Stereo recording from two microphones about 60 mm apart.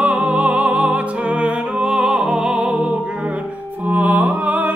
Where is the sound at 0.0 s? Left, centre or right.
Right.